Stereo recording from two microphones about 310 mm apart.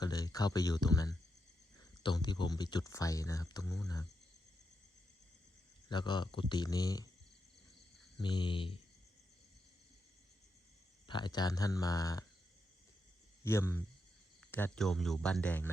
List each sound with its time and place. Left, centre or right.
0.0 s speech: centre
5.9 s speech: centre
8.2 s speech: centre
11.1 s speech: centre
13.4 s speech: centre